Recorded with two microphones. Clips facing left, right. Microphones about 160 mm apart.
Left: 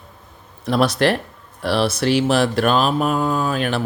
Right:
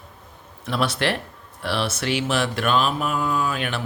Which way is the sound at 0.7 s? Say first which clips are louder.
Left 6 dB; 40° left (ahead or behind).